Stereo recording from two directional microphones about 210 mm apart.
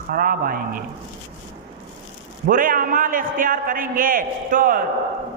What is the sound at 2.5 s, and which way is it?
A man's voice, 40° right (ahead or behind).